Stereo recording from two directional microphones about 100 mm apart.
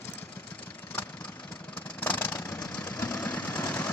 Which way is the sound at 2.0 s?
20° left (ahead or behind).